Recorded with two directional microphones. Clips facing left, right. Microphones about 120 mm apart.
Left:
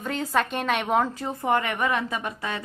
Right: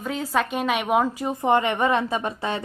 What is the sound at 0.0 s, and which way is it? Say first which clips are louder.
A woman's voice: right 1 dB; centre (ahead or behind).